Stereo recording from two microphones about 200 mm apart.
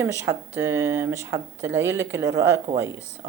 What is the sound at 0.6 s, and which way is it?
Speech, 15° right (ahead or behind).